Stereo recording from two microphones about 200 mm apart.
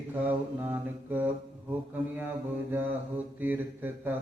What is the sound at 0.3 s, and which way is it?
Mantra, 10° right (ahead or behind).